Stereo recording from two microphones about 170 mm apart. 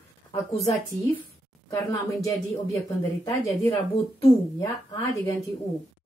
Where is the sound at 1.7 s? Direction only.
20° left (ahead or behind).